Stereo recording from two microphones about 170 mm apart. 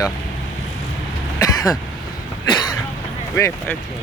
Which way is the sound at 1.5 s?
20° left (ahead or behind).